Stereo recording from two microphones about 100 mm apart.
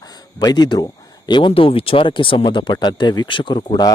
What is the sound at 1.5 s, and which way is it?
Speech, 65° left (ahead or behind).